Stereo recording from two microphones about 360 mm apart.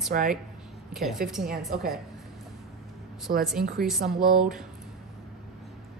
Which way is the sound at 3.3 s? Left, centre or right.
Right.